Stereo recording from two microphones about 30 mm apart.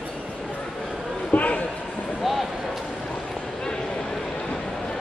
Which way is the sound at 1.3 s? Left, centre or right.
Left.